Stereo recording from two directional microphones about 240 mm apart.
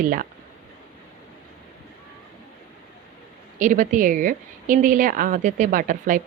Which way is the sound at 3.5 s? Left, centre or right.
Right.